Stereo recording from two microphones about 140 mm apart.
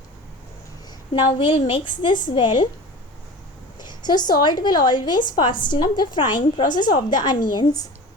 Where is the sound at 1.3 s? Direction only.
35° left (ahead or behind).